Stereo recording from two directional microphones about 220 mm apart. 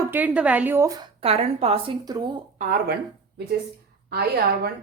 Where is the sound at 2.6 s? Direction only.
40° right (ahead or behind).